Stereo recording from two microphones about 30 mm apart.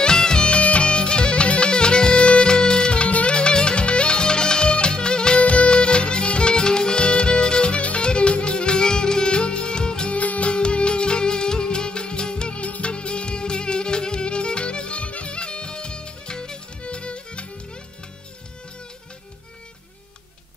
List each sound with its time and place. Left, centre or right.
0.0 s music: left
0.5 s music: left
2.9 s music: left
3.3 s music: left
5.4 s music: left
5.7 s music: left
10.1 s music: left
10.5 s music: left
16.8 s music: left